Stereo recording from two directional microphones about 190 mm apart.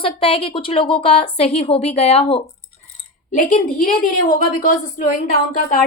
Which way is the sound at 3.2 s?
45° left (ahead or behind).